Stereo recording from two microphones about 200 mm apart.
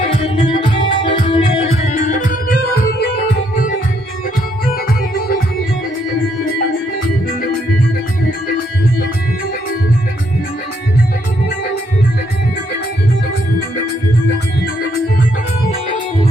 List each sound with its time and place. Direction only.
0.1 s music: 25° left (ahead or behind)